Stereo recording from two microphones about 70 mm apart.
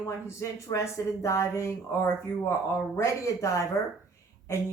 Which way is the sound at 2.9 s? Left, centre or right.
Left.